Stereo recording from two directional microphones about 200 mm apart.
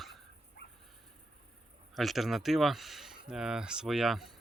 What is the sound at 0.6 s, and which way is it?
Dog, 50° left (ahead or behind).